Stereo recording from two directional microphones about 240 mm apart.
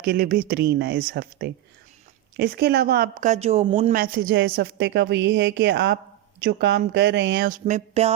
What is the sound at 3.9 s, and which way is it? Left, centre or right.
A woman's voice, right.